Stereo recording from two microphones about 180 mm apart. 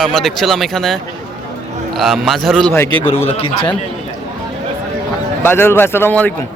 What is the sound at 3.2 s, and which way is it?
Speech, 30° left (ahead or behind).